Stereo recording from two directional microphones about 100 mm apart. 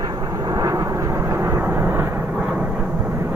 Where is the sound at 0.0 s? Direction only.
35° right (ahead or behind).